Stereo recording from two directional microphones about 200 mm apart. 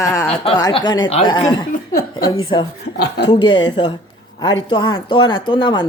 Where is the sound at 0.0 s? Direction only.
15° left (ahead or behind).